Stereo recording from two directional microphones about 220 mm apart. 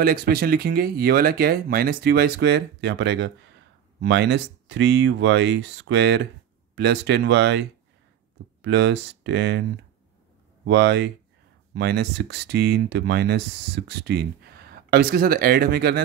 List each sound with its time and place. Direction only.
0.0 s speech: 45° right (ahead or behind)
8.6 s speech: 55° right (ahead or behind)
10.7 s speech: 50° right (ahead or behind)